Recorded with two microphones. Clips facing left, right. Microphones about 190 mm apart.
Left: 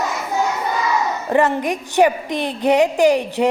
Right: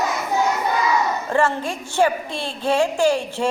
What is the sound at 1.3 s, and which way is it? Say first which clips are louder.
A woman's voice: left 5 dB; 20° left (ahead or behind).